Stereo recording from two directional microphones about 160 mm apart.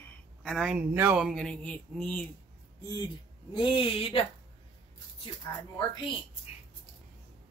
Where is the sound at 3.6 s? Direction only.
30° left (ahead or behind).